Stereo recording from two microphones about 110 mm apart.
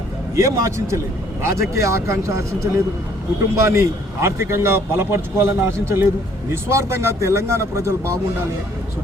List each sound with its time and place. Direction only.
0.3 s a man's voice: 30° right (ahead or behind)
3.5 s a man's voice: 25° right (ahead or behind)